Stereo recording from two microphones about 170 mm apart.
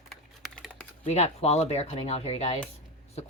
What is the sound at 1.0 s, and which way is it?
Speech, 40° left (ahead or behind).